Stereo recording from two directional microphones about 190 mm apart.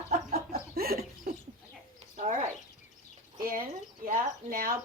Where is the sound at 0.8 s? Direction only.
50° right (ahead or behind).